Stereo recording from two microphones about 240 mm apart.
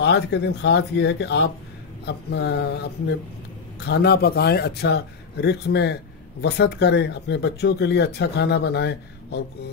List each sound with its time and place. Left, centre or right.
0.0 s speech: left